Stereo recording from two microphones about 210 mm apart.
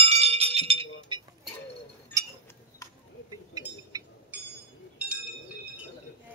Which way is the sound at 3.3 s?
15° right (ahead or behind).